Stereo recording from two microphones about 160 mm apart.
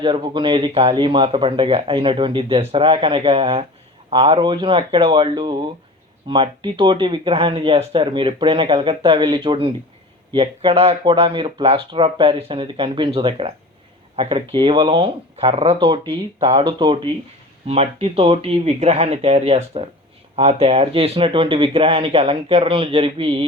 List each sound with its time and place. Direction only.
0.0 s speech: 30° right (ahead or behind)